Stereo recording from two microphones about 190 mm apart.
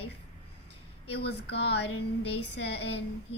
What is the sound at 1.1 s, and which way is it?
A woman's voice, 60° left (ahead or behind).